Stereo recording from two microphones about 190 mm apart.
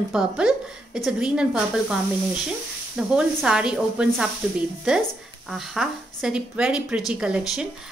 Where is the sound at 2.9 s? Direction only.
5° right (ahead or behind).